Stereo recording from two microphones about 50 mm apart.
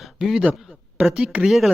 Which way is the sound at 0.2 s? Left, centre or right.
Centre.